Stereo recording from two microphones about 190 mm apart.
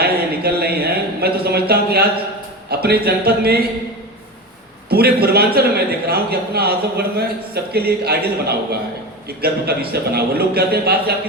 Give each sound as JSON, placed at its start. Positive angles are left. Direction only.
{"t": 0.0, "sound": "a sound", "side_deg": -55}
{"t": 2.6, "sound": "a man's voice", "side_deg": -55}
{"t": 4.9, "sound": "a man's voice", "side_deg": -55}